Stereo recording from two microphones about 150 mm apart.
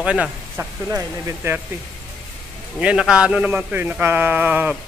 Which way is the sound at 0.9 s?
20° right (ahead or behind).